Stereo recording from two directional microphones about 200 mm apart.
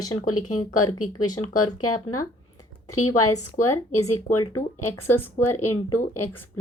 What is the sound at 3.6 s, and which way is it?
Speech, 40° left (ahead or behind).